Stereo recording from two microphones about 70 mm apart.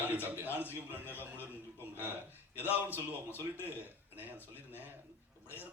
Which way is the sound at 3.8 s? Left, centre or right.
Right.